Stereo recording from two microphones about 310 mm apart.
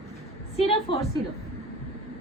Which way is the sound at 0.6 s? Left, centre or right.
Centre.